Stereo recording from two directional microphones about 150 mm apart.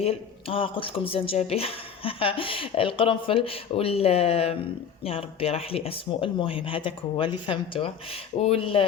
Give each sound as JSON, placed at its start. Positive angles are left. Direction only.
{"t": 0.0, "sound": "speech", "side_deg": 40}